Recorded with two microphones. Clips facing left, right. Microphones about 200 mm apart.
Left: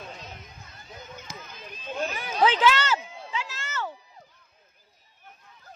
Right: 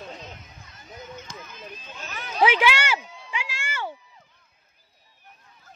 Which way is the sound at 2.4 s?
10° right (ahead or behind).